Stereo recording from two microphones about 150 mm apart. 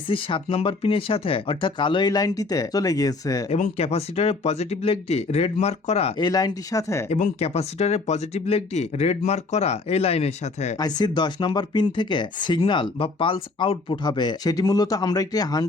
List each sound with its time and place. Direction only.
0.1 s speech: 35° left (ahead or behind)
3.5 s speech: 45° left (ahead or behind)
6.1 s speech: 25° left (ahead or behind)
7.1 s speech: 45° left (ahead or behind)
10.8 s speech: 25° left (ahead or behind)